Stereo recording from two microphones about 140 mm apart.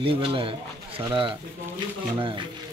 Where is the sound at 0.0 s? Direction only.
35° right (ahead or behind).